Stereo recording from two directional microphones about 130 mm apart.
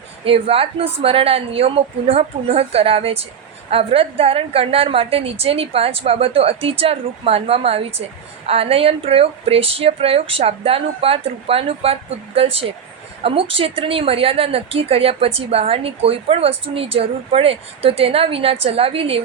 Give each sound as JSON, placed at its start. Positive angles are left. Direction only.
{"t": 0.3, "sound": "speech", "side_deg": -50}